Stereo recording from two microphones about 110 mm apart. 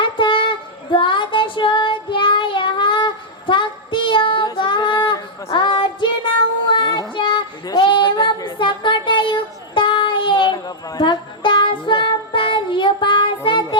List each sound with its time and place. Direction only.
0.0 s female singing: 50° left (ahead or behind)
5.5 s child singing: 45° left (ahead or behind)
7.2 s a sound: 45° left (ahead or behind)